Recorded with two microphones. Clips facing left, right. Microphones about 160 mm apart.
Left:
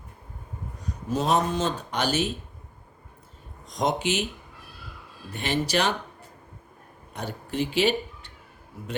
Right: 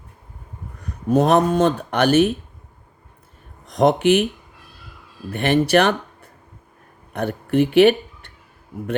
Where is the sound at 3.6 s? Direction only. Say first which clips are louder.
Right 10 dB; 60° right (ahead or behind).